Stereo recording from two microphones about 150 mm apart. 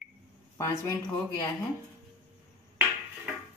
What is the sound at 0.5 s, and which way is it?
Speech, 20° left (ahead or behind).